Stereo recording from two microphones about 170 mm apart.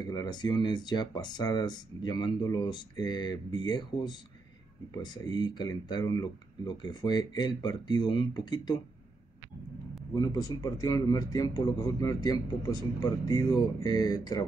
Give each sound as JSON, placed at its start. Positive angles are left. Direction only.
{"t": 0.0, "sound": "a man's voice", "side_deg": 25}
{"t": 10.1, "sound": "a man's voice", "side_deg": 20}